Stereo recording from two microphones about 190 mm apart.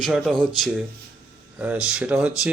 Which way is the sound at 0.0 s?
Centre (ahead or behind).